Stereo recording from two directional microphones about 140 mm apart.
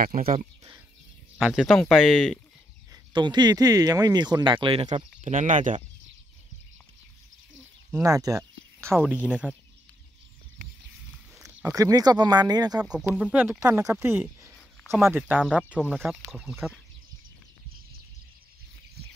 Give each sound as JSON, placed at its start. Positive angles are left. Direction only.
{"t": 0.0, "sound": "speech", "side_deg": -80}
{"t": 1.4, "sound": "speech", "side_deg": -5}
{"t": 2.9, "sound": "speech", "side_deg": -35}
{"t": 5.2, "sound": "speech", "side_deg": -60}
{"t": 7.9, "sound": "speech", "side_deg": -20}
{"t": 9.1, "sound": "speech", "side_deg": -10}
{"t": 11.6, "sound": "speech", "side_deg": -25}
{"t": 12.8, "sound": "speech", "side_deg": -5}